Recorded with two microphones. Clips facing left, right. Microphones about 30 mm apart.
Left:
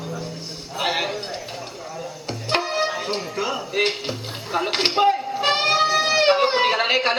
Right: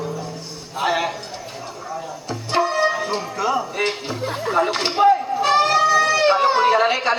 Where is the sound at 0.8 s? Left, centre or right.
Left.